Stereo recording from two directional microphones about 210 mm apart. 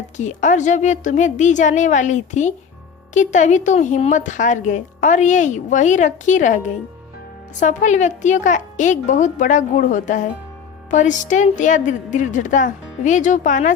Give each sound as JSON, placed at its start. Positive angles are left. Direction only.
{"t": 0.2, "sound": "speech", "side_deg": 35}